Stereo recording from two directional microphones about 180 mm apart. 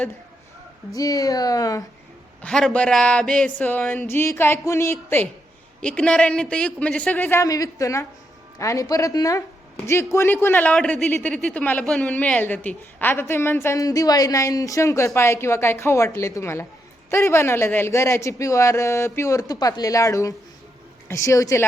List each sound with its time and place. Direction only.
0.9 s speech: 20° left (ahead or behind)
2.4 s a man's voice: 5° left (ahead or behind)